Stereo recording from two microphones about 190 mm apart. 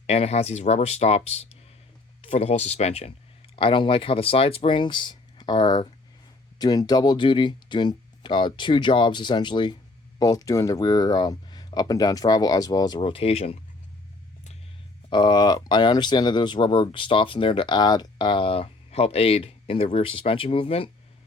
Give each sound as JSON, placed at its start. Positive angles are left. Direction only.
{"t": 0.1, "sound": "speech", "side_deg": 35}
{"t": 15.1, "sound": "speech", "side_deg": 20}